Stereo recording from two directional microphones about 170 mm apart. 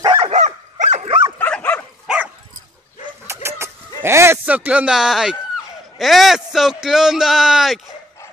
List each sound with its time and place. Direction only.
0.0 s dog: 25° right (ahead or behind)
0.3 s dog: 45° right (ahead or behind)
1.4 s dog: 10° left (ahead or behind)
3.4 s a man's voice: 15° right (ahead or behind)